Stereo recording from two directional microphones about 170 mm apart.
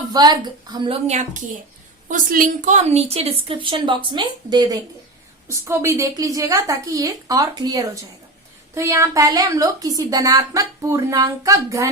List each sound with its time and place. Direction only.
0.1 s a woman's voice: 25° right (ahead or behind)
1.0 s a woman's voice: 45° right (ahead or behind); by 11.9 s 20° right (ahead or behind)